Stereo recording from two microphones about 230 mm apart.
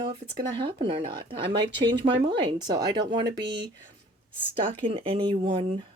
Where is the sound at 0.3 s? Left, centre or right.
Right.